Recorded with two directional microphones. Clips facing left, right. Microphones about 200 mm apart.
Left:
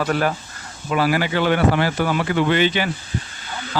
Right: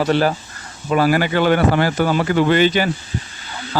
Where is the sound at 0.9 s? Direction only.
45° right (ahead or behind).